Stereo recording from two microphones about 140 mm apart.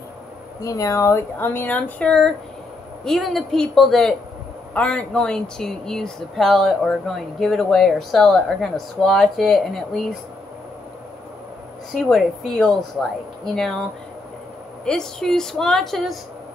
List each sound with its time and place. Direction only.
0.6 s speech: 25° left (ahead or behind); by 10.0 s centre (ahead or behind)
11.9 s speech: centre (ahead or behind)
14.9 s speech: 5° left (ahead or behind)